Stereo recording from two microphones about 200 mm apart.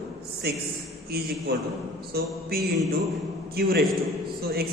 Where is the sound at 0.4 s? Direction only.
55° right (ahead or behind).